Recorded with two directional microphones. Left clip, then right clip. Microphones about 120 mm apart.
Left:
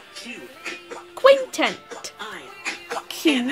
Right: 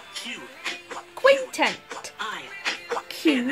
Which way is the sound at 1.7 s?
25° left (ahead or behind).